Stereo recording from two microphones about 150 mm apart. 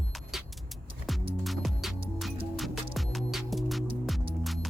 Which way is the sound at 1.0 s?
Centre (ahead or behind).